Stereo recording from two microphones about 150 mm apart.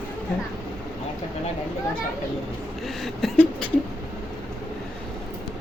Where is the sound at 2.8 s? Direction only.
Centre (ahead or behind).